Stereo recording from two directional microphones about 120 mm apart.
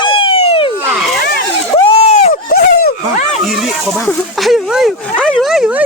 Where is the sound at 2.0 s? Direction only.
65° left (ahead or behind).